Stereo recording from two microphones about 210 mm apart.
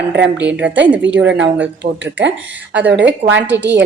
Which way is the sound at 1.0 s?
60° right (ahead or behind).